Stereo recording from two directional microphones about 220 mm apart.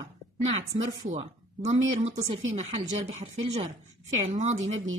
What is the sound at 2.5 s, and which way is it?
A woman's voice, 25° right (ahead or behind).